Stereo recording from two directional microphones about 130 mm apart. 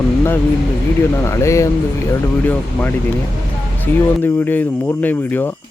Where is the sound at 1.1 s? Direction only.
20° left (ahead or behind).